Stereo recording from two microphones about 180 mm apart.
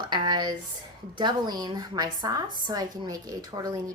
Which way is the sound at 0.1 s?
25° right (ahead or behind).